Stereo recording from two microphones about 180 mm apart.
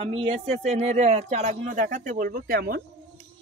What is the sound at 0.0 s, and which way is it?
Speech, 30° right (ahead or behind).